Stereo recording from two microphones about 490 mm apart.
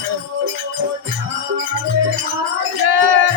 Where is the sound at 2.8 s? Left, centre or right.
Right.